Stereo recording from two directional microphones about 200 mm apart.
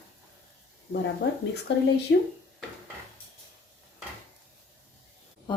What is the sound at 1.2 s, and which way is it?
Speech, 55° left (ahead or behind).